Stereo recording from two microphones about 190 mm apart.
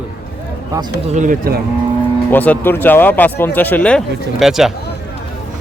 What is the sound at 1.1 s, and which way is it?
Speech, 45° right (ahead or behind).